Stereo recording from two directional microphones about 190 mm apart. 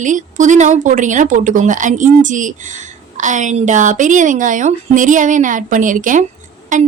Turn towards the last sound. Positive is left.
turn(degrees=-40)  # may be behind; listen again after turning